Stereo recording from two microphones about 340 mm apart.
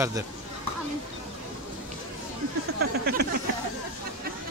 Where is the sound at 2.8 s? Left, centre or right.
Right.